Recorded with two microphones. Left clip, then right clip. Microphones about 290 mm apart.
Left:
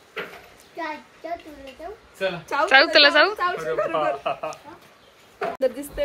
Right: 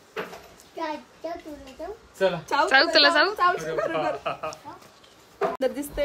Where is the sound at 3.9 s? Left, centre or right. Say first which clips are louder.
Left 3 dB; left.